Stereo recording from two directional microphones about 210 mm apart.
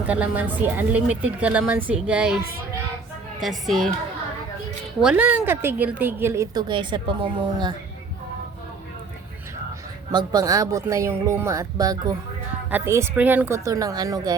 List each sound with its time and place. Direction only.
0.0 s a woman's voice: 5° right (ahead or behind)
3.4 s speech: centre (ahead or behind)
5.0 s a woman's voice: 5° right (ahead or behind)
10.1 s a woman's voice: 20° right (ahead or behind)